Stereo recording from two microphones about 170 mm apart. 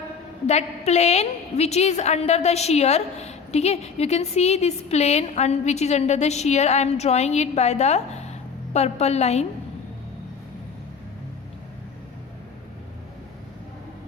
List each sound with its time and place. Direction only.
0.4 s a woman's voice: 40° left (ahead or behind)